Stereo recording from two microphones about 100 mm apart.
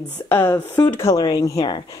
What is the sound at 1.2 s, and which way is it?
Speech, 40° left (ahead or behind).